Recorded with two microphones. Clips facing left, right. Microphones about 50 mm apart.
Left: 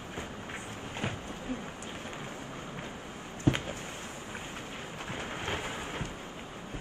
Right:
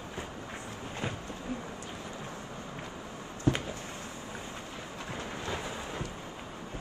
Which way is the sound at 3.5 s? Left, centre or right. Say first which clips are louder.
Even; left.